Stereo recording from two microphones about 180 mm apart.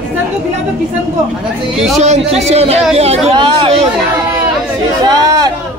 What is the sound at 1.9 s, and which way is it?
Speech, 35° right (ahead or behind).